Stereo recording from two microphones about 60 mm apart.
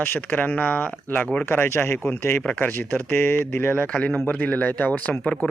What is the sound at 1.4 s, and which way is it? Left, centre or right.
Speech, left.